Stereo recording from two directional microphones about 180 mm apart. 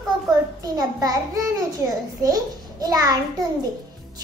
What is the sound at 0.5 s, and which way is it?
A child's voice, 20° right (ahead or behind).